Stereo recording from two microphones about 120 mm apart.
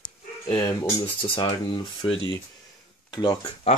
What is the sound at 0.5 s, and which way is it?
Speech, 30° left (ahead or behind).